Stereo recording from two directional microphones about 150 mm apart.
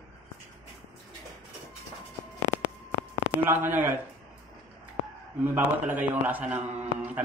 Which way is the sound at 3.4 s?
15° right (ahead or behind).